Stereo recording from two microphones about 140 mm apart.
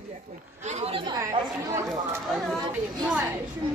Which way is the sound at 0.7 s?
45° right (ahead or behind).